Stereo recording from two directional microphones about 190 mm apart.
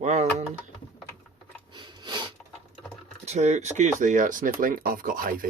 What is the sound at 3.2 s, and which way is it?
Speech, 35° right (ahead or behind).